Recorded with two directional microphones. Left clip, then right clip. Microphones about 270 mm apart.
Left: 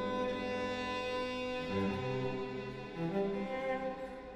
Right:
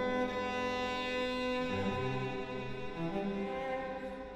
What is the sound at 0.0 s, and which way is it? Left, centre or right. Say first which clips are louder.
Music: right 2 dB; left.